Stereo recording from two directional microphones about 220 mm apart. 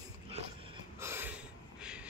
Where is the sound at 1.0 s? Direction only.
10° right (ahead or behind).